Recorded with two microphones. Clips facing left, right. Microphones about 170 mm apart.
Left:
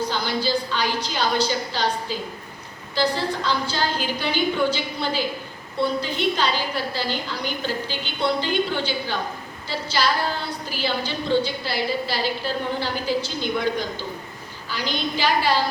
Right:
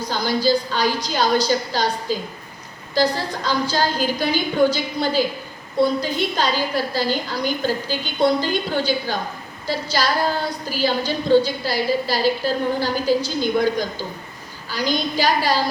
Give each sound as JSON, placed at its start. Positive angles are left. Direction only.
{"t": 0.1, "sound": "a woman's voice", "side_deg": -40}